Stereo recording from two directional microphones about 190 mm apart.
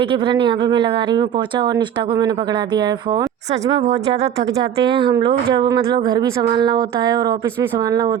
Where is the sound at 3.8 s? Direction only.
35° right (ahead or behind).